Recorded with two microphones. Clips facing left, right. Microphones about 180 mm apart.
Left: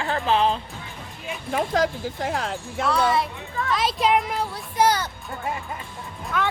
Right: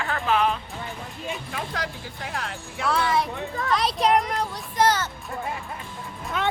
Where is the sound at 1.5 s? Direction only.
50° left (ahead or behind).